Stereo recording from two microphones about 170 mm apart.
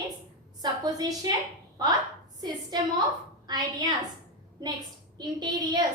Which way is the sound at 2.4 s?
25° right (ahead or behind).